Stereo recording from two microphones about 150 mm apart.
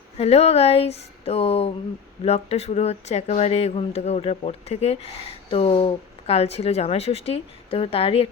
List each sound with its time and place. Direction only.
0.2 s speech: 40° left (ahead or behind)